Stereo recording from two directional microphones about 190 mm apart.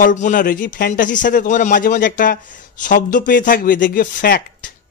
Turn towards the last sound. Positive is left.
turn(degrees=55)  # may be behind; listen again after turning